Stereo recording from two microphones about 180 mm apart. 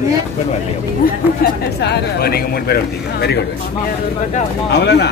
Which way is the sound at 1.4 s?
55° left (ahead or behind).